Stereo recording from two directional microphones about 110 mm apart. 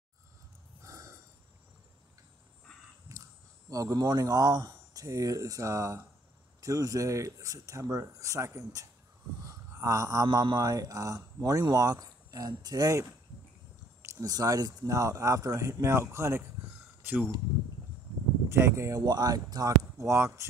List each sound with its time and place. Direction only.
0.8 s snort: 30° right (ahead or behind)
3.1 s a sound: 30° right (ahead or behind)
3.7 s speech: 35° right (ahead or behind)
9.5 s a sound: 30° right (ahead or behind)
10.2 s speech: 40° right (ahead or behind)
14.0 s speech: 30° right (ahead or behind); by 17.3 s 15° right (ahead or behind)
18.5 s speech: 25° right (ahead or behind)